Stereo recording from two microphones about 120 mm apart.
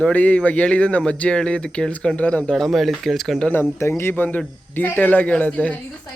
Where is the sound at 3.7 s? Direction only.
20° left (ahead or behind).